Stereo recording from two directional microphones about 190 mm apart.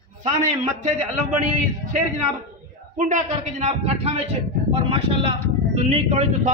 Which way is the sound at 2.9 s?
40° right (ahead or behind).